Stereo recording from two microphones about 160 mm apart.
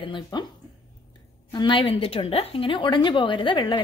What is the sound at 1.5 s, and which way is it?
A woman's voice, 30° left (ahead or behind).